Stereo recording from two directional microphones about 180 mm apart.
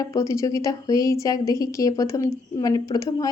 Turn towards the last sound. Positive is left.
turn(degrees=20)  # may be behind; listen again after turning